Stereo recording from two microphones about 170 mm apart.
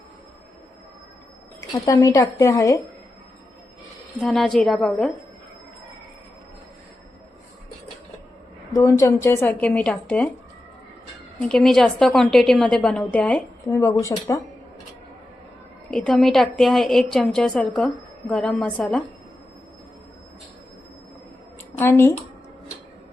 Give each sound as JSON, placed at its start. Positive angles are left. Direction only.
{"t": 1.7, "sound": "a woman's voice", "side_deg": 20}
{"t": 4.2, "sound": "a woman's voice", "side_deg": 0}
{"t": 8.7, "sound": "a woman's voice", "side_deg": 20}
{"t": 11.4, "sound": "a woman's voice", "side_deg": 0}
{"t": 15.9, "sound": "a woman's voice", "side_deg": 5}
{"t": 21.8, "sound": "a woman's voice", "side_deg": 15}